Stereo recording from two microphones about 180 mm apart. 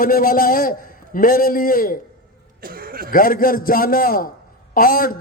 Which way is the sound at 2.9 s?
55° right (ahead or behind).